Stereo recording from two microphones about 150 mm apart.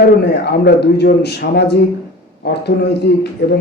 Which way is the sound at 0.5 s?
90° left.